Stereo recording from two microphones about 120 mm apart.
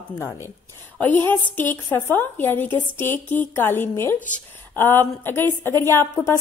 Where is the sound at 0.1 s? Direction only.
25° left (ahead or behind).